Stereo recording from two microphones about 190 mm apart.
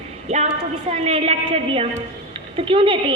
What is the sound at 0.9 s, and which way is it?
A woman's voice, 35° right (ahead or behind).